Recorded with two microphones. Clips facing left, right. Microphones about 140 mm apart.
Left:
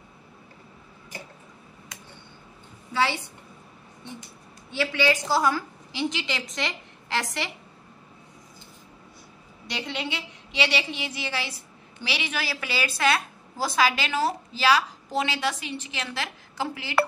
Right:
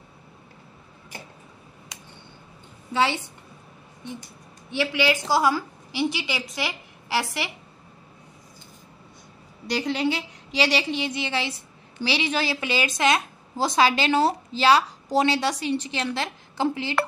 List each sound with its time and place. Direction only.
2.9 s a woman's voice: 15° right (ahead or behind)
4.7 s a woman's voice: 15° right (ahead or behind)
9.9 s a woman's voice: 35° right (ahead or behind)
11.1 s a woman's voice: 25° right (ahead or behind)